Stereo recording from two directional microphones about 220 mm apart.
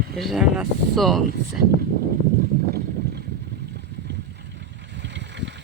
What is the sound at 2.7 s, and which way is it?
Boat, 45° right (ahead or behind).